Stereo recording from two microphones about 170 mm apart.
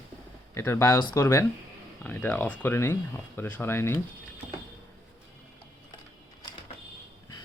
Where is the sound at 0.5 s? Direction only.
15° left (ahead or behind).